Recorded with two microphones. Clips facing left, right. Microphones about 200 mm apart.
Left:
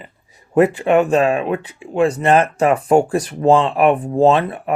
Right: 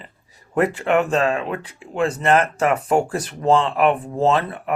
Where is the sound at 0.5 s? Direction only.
25° left (ahead or behind).